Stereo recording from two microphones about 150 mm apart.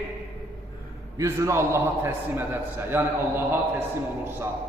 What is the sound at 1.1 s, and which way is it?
A man's voice, 20° right (ahead or behind).